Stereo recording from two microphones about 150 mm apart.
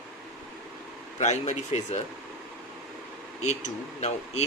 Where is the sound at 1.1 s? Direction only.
50° left (ahead or behind).